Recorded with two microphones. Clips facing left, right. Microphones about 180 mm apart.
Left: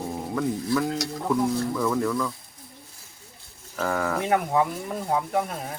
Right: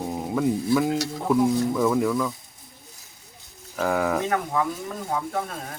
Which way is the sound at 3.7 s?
10° right (ahead or behind).